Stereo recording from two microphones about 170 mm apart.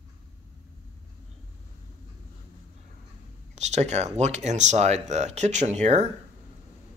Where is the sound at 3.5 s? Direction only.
40° right (ahead or behind).